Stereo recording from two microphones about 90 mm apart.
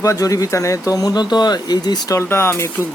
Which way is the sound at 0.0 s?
40° left (ahead or behind).